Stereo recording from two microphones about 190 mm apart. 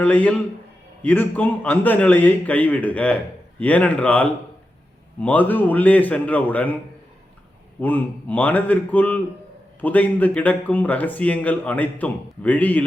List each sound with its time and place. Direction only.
0.0 s speech: 5° left (ahead or behind)
7.8 s speech: 10° left (ahead or behind)